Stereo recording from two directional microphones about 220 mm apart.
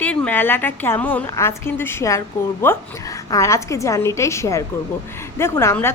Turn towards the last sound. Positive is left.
turn(degrees=10)  # may be behind; listen again after turning